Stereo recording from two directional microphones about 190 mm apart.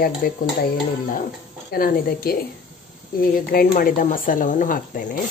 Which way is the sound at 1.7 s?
50° left (ahead or behind).